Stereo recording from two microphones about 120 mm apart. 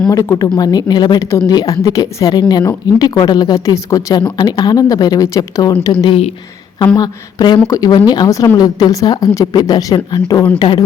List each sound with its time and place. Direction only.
0.1 s speech: 25° left (ahead or behind)
6.1 s speech: 60° left (ahead or behind)
6.9 s speech: 35° left (ahead or behind)